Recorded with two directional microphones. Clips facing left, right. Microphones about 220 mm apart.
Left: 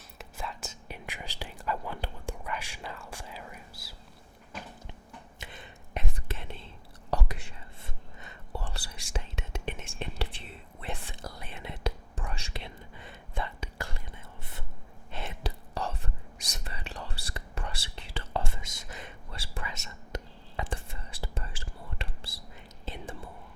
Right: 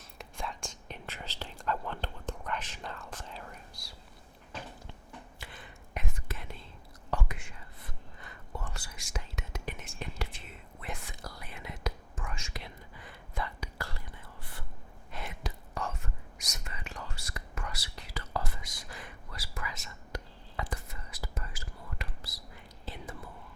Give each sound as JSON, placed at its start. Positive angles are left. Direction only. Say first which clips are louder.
{"t": 0.2, "sound": "whispering", "louder": "even", "side_deg": 5}
{"t": 5.4, "sound": "whispering", "louder": "left 2 dB", "side_deg": 20}
{"t": 15.1, "sound": "whispering", "louder": "left 3 dB", "side_deg": 30}